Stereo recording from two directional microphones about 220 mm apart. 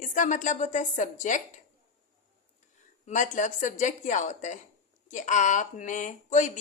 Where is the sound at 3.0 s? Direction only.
35° left (ahead or behind).